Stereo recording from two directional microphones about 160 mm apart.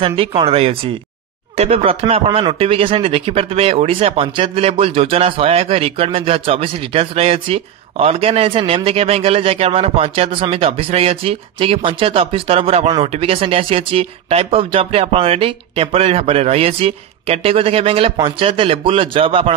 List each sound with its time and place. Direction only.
0.0 s speech: 35° right (ahead or behind)